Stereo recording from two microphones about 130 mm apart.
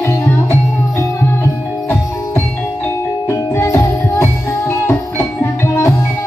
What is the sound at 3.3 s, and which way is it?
Music, 20° left (ahead or behind).